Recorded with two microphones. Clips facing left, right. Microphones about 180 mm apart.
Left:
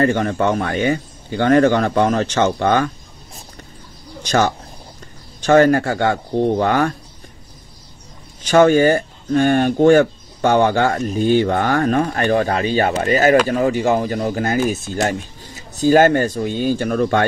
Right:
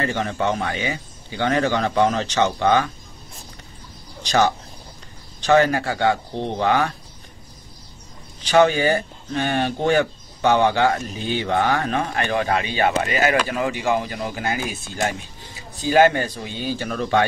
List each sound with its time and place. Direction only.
0.0 s speech: 50° left (ahead or behind)
4.2 s speech: 50° left (ahead or behind)
8.4 s speech: 45° left (ahead or behind)